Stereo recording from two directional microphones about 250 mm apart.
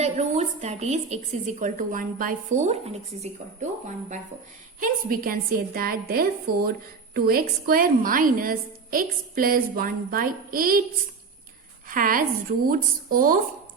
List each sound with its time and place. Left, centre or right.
0.0 s a woman's voice: right
4.8 s a woman's voice: right
11.9 s a woman's voice: right